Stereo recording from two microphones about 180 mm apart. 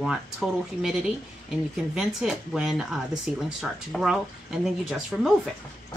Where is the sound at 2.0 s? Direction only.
Centre (ahead or behind).